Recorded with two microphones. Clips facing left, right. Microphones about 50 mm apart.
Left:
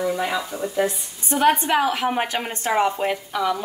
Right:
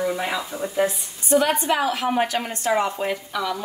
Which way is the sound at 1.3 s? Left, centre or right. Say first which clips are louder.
Left 1 dB; left.